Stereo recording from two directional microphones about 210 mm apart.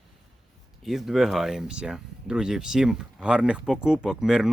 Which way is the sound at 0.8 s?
Centre (ahead or behind).